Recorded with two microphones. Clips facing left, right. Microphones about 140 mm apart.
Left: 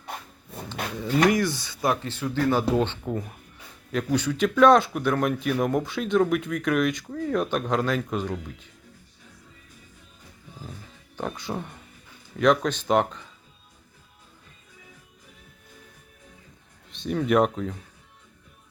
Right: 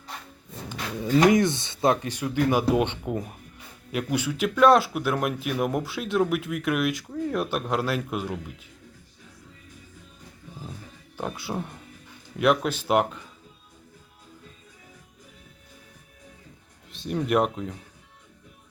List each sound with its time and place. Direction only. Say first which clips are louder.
1.3 s speech: right 3 dB; 20° right (ahead or behind)
11.2 s speech: even; 10° right (ahead or behind)
16.9 s a sound: left 2 dB; centre (ahead or behind)
17.2 s speech: left 2 dB; centre (ahead or behind)